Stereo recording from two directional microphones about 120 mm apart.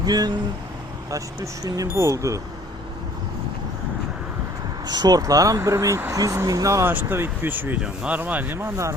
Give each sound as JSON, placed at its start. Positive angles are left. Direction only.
{"t": 0.0, "sound": "speech", "side_deg": -35}
{"t": 1.6, "sound": "speech", "side_deg": -30}
{"t": 4.9, "sound": "speech", "side_deg": -35}